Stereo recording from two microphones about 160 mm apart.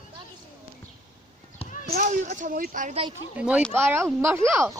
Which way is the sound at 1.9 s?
50° right (ahead or behind).